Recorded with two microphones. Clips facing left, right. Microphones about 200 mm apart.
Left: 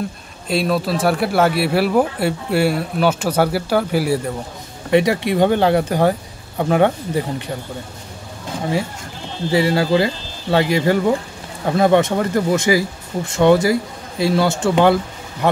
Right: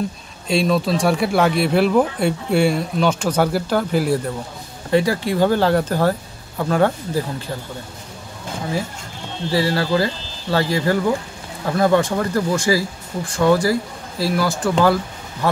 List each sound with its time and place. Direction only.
0.5 s speech: 5° left (ahead or behind)
4.9 s speech: 20° left (ahead or behind)
9.5 s speech: 20° left (ahead or behind)